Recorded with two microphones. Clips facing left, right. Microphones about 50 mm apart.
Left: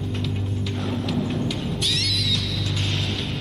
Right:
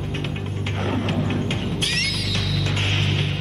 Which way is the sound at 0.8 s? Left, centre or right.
Right.